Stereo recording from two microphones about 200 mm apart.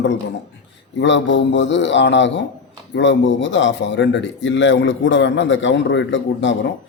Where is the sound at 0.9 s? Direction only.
65° left (ahead or behind).